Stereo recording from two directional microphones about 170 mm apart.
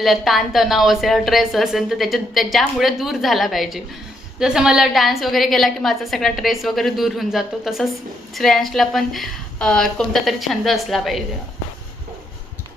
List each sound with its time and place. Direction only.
0.0 s a woman's voice: centre (ahead or behind)